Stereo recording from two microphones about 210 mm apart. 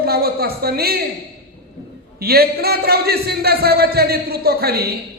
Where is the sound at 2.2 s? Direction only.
45° right (ahead or behind).